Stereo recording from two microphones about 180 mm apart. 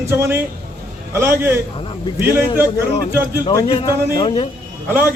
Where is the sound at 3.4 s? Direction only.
20° left (ahead or behind).